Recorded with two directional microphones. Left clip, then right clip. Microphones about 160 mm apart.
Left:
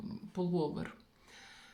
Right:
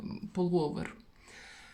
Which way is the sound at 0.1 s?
30° right (ahead or behind).